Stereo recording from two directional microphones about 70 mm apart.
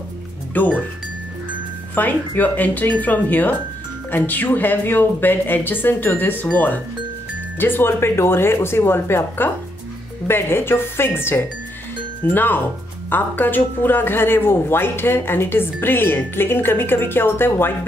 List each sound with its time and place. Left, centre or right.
0.6 s speech: left
2.0 s a woman's voice: left